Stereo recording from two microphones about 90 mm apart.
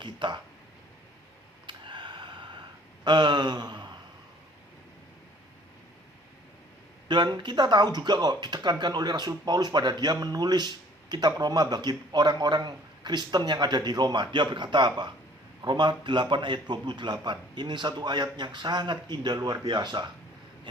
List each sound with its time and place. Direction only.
0.0 s a man's voice: 60° right (ahead or behind)
1.6 s gasp: 60° right (ahead or behind)
7.1 s a man's voice: 60° right (ahead or behind)